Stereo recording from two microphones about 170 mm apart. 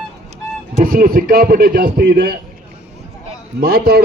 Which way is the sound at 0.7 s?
55° right (ahead or behind).